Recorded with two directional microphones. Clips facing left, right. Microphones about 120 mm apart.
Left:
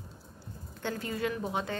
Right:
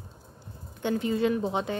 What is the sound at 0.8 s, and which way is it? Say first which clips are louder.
Speech: right 7 dB; 20° right (ahead or behind).